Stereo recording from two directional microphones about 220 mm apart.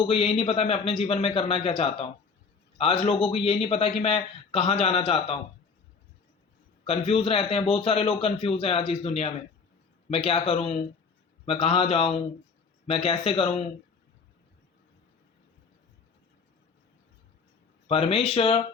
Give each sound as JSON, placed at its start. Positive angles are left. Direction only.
{"t": 0.0, "sound": "a man's voice", "side_deg": 25}
{"t": 3.2, "sound": "a man's voice", "side_deg": 25}
{"t": 6.8, "sound": "a man's voice", "side_deg": 25}
{"t": 17.8, "sound": "a man's voice", "side_deg": 25}